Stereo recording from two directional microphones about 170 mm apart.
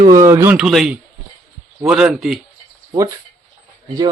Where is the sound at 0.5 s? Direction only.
Centre (ahead or behind).